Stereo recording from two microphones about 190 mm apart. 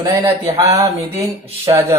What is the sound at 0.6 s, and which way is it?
Speech, 15° right (ahead or behind).